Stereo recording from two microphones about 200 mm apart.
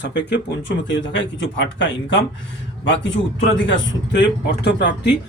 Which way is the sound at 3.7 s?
60° left (ahead or behind).